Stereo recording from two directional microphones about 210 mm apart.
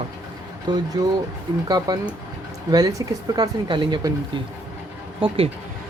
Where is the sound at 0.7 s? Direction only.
20° right (ahead or behind).